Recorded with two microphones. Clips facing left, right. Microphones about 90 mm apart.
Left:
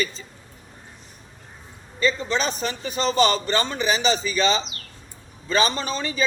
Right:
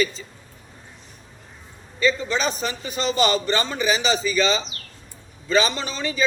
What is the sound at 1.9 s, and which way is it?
A man's voice, 40° left (ahead or behind).